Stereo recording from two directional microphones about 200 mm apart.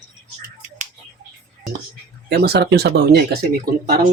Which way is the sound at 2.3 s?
55° right (ahead or behind).